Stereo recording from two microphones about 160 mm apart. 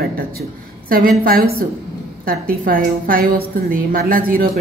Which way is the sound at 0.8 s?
70° right (ahead or behind).